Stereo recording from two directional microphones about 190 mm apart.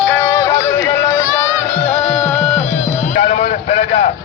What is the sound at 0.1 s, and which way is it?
Music, 15° left (ahead or behind).